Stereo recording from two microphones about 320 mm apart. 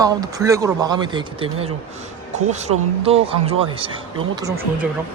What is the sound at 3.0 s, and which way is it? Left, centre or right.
Speech, centre.